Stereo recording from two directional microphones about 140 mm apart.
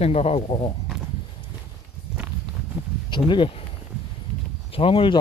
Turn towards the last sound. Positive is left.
turn(degrees=40)  # may be behind; listen again after turning